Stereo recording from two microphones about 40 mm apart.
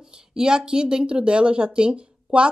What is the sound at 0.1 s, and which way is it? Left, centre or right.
Speech, centre.